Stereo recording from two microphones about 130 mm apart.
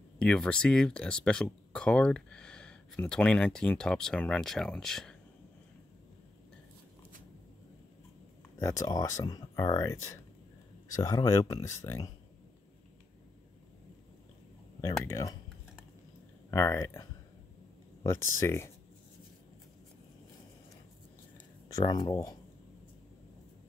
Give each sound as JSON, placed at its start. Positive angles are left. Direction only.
{"t": 0.2, "sound": "speech", "side_deg": 5}
{"t": 8.5, "sound": "speech", "side_deg": 25}
{"t": 14.8, "sound": "speech", "side_deg": 25}
{"t": 16.4, "sound": "speech", "side_deg": 20}
{"t": 21.6, "sound": "speech", "side_deg": 30}